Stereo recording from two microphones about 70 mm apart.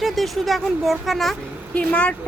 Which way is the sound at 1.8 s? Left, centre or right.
Centre.